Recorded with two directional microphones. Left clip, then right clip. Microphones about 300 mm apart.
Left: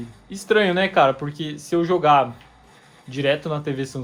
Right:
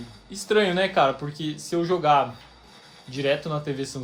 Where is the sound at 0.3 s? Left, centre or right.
Left.